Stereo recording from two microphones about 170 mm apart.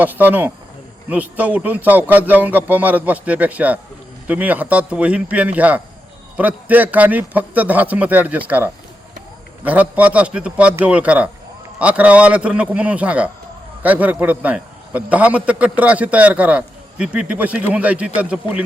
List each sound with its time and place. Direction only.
0.0 s a man's voice: 10° right (ahead or behind)